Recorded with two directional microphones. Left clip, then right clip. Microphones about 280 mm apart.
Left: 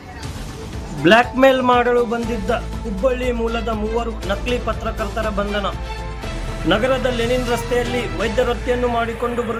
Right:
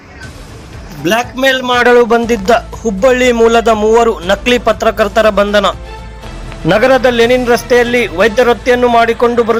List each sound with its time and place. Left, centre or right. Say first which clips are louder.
1.0 s a man's voice: even; centre
1.5 s a man's voice: right 9 dB; right